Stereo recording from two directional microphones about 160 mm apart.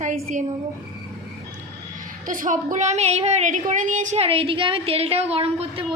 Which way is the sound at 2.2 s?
55° right (ahead or behind).